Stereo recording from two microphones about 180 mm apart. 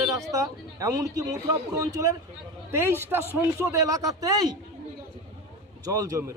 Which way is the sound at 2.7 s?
15° right (ahead or behind).